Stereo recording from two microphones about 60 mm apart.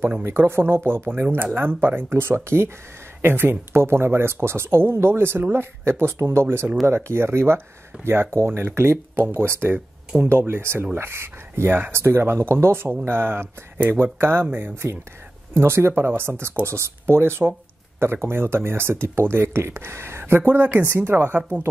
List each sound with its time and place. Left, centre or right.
0.2 s speech: right